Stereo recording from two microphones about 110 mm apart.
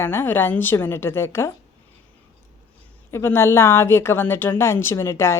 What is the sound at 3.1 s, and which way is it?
Speech, 25° left (ahead or behind).